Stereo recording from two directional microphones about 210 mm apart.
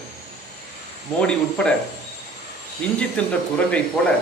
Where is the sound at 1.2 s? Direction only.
5° left (ahead or behind).